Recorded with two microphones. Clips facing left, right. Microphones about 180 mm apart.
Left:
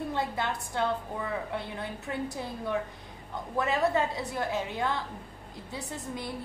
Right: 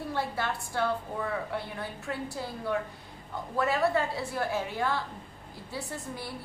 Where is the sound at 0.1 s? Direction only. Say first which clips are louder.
Even; 20° left (ahead or behind).